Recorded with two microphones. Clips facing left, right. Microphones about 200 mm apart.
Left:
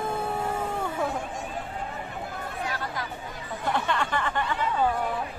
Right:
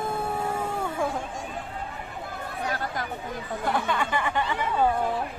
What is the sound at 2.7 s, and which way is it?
Chatter, 50° right (ahead or behind).